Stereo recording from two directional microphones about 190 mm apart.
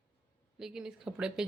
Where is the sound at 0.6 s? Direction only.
5° right (ahead or behind).